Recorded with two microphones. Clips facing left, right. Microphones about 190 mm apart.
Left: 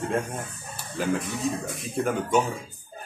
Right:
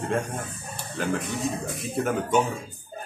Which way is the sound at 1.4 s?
Centre (ahead or behind).